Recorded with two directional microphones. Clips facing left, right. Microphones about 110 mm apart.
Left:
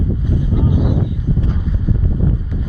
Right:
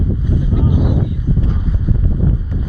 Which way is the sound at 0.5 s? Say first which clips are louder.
Even; 25° right (ahead or behind).